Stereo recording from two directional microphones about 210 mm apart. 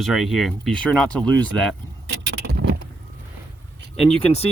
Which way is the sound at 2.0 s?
55° right (ahead or behind).